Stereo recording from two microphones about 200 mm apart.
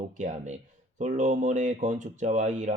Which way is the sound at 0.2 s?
35° right (ahead or behind).